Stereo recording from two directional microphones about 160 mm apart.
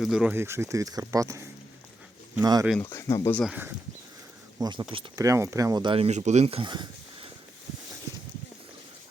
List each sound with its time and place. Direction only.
0.0 s speech: 5° right (ahead or behind); by 2.6 s 25° right (ahead or behind)
2.9 s speech: 20° left (ahead or behind)
4.5 s speech: 25° right (ahead or behind)
5.2 s speech: 20° right (ahead or behind)